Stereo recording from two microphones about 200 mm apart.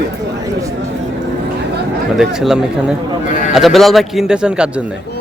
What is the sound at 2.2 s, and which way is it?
A man's voice, centre (ahead or behind).